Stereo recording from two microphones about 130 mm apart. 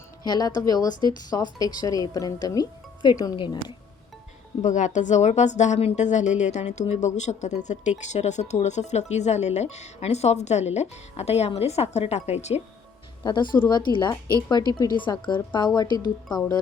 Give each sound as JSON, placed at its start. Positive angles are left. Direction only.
{"t": 0.3, "sound": "speech", "side_deg": 30}
{"t": 4.6, "sound": "a woman's voice", "side_deg": 70}
{"t": 13.2, "sound": "speech", "side_deg": 35}